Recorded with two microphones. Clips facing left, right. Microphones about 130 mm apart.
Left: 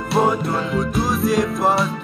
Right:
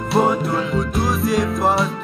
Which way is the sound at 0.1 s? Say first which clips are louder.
Right 1 dB; centre (ahead or behind).